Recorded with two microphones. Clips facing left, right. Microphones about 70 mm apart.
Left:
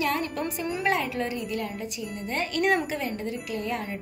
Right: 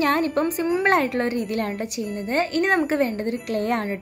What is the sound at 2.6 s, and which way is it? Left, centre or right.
A woman's voice, right.